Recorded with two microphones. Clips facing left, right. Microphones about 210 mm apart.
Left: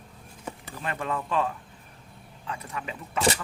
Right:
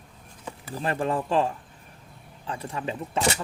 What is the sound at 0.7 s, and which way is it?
Speech, 35° right (ahead or behind).